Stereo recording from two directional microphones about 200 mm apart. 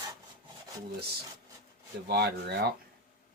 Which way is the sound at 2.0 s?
55° right (ahead or behind).